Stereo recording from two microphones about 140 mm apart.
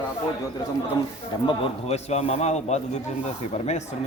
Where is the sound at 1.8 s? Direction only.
50° left (ahead or behind).